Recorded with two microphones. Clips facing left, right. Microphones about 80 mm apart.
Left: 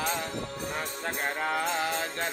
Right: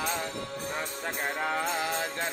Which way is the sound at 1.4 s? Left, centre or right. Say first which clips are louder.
Left 1 dB; left.